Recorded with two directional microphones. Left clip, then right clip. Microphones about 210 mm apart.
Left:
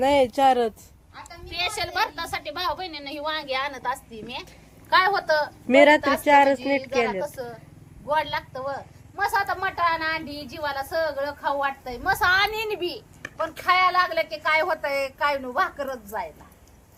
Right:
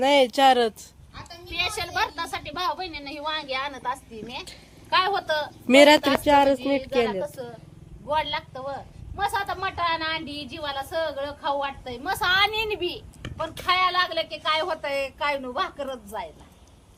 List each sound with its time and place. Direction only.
0.0 s a woman's voice: centre (ahead or behind)
1.5 s speech: 15° left (ahead or behind)
5.6 s a woman's voice: 15° right (ahead or behind)
8.0 s a woman's voice: 10° left (ahead or behind)